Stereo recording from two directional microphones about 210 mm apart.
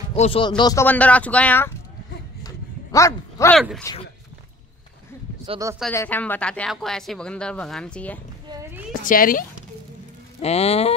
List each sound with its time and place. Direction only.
0.1 s speech: 25° left (ahead or behind)
0.8 s speech: 5° left (ahead or behind)
2.4 s a sound: 15° left (ahead or behind)
3.5 s speech: centre (ahead or behind)
5.9 s speech: 10° left (ahead or behind)
8.5 s a sound: 15° right (ahead or behind)
9.0 s speech: 40° left (ahead or behind)
10.4 s speech: 30° left (ahead or behind)